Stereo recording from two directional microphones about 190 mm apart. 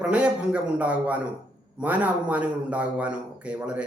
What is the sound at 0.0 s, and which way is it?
Speech, 5° right (ahead or behind).